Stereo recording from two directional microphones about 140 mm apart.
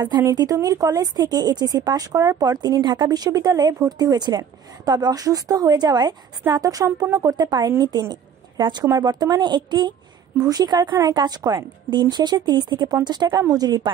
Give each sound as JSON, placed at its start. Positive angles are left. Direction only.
{"t": 0.1, "sound": "a woman's voice", "side_deg": -25}